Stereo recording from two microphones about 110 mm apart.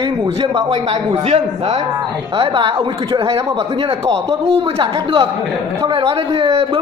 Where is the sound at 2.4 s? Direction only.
50° right (ahead or behind).